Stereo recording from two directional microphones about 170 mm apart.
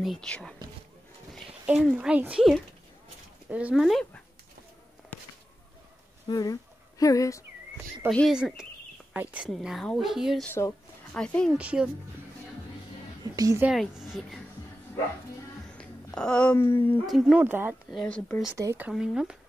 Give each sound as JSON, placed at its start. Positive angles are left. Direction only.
{"t": 0.0, "sound": "speech", "side_deg": 0}
{"t": 6.2, "sound": "a woman's voice", "side_deg": 20}
{"t": 8.1, "sound": "speech", "side_deg": 5}
{"t": 11.5, "sound": "speech", "side_deg": -5}
{"t": 13.4, "sound": "a woman's voice", "side_deg": -20}
{"t": 13.7, "sound": "speech", "side_deg": -5}
{"t": 15.8, "sound": "speech", "side_deg": 5}
{"t": 17.0, "sound": "speech", "side_deg": 0}
{"t": 17.9, "sound": "speech", "side_deg": 5}
{"t": 18.5, "sound": "speech", "side_deg": -15}